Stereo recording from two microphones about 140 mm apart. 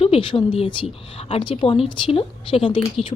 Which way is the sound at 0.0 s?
40° left (ahead or behind).